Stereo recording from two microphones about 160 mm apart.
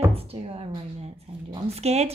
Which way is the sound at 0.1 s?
40° right (ahead or behind).